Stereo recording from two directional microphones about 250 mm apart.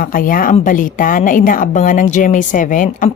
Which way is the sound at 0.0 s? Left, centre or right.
Left.